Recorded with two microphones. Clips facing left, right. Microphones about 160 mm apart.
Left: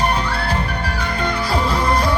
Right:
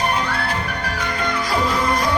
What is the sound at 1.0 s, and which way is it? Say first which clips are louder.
Music: left 1 dB; 30° left (ahead or behind).